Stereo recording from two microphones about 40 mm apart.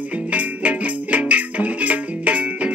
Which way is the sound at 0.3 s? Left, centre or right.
Right.